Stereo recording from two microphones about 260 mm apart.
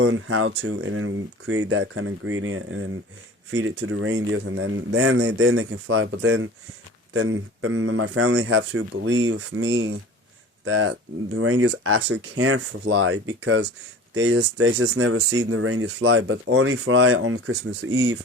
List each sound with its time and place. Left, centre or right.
0.0 s speech: right